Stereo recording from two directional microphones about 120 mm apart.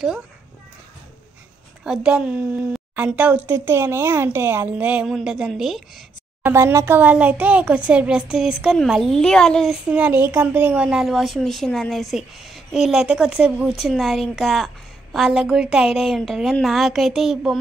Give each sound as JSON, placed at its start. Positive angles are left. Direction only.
{"t": 1.9, "sound": "speech", "side_deg": -10}
{"t": 5.0, "sound": "a woman's voice", "side_deg": 0}
{"t": 6.4, "sound": "speech", "side_deg": -25}
{"t": 7.0, "sound": "a woman's voice", "side_deg": -15}
{"t": 9.8, "sound": "a woman's voice", "side_deg": -10}